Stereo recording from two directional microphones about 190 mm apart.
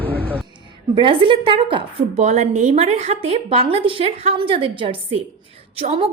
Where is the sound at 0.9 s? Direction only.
25° right (ahead or behind).